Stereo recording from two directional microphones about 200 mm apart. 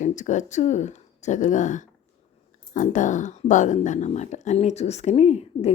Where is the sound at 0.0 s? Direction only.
40° left (ahead or behind).